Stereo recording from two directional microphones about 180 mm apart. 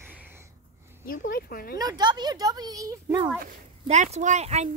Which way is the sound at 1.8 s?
20° right (ahead or behind).